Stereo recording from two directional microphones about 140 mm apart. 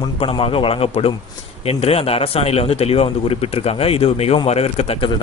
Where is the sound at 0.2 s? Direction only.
40° left (ahead or behind).